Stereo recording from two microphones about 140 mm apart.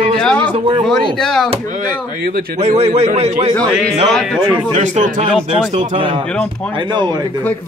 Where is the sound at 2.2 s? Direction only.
90° right.